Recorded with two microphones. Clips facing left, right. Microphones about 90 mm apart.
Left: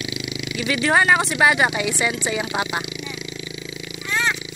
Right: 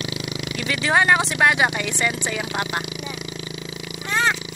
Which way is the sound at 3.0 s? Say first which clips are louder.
Even; 50° right (ahead or behind).